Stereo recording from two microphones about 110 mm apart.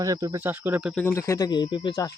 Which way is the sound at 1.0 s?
30° left (ahead or behind).